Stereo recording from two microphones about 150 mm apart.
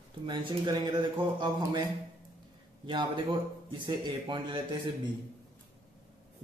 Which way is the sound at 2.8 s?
30° right (ahead or behind).